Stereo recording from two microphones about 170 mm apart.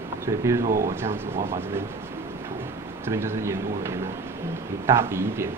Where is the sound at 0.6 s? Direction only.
55° right (ahead or behind).